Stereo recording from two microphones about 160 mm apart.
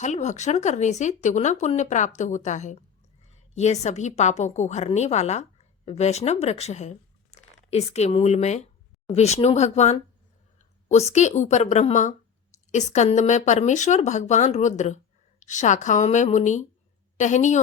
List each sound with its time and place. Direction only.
0.0 s a woman's voice: 45° left (ahead or behind)